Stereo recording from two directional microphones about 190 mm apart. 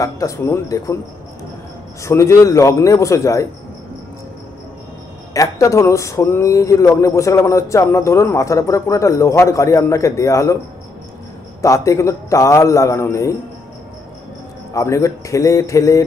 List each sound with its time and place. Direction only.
0.0 s speech: 15° left (ahead or behind)
2.0 s speech: 15° left (ahead or behind)
5.3 s speech: 15° left (ahead or behind)
11.6 s speech: 15° left (ahead or behind)
14.7 s speech: 15° left (ahead or behind)